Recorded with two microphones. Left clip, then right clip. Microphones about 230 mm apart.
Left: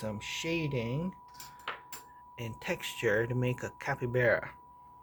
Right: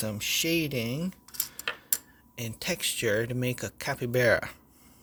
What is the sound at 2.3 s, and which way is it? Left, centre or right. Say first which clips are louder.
Speech: right 4 dB; right.